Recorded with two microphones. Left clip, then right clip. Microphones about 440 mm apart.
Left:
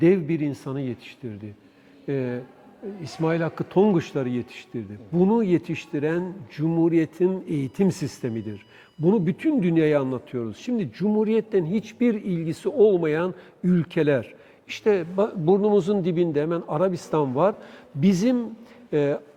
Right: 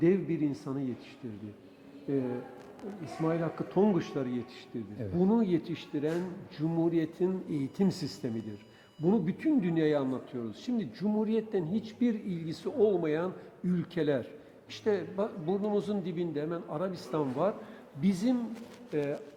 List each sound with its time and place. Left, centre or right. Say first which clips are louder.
0.0 s a man's voice: left 7 dB; left
3.0 s a man's voice: left 7 dB; left